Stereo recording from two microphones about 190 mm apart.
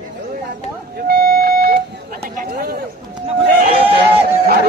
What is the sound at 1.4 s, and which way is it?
Vehicle, 55° right (ahead or behind).